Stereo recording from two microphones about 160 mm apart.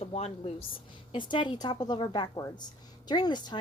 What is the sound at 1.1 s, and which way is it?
A woman's voice, 30° left (ahead or behind).